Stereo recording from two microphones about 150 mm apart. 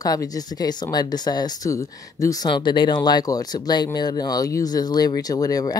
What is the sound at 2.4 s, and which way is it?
A woman's voice, 30° left (ahead or behind).